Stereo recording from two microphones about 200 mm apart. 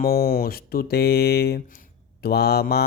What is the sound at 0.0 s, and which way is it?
Speech, 50° left (ahead or behind).